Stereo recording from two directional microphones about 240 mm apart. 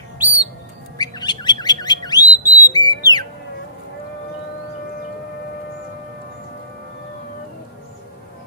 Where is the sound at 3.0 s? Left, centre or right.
Centre.